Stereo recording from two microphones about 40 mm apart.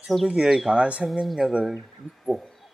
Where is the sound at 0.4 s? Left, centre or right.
Centre.